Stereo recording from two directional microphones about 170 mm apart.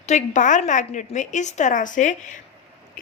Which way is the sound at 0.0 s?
45° left (ahead or behind).